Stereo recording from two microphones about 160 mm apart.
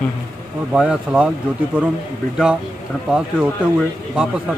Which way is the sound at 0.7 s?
5° right (ahead or behind).